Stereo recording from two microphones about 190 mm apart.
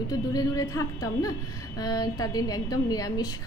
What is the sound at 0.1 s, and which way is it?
A woman's voice, 20° left (ahead or behind).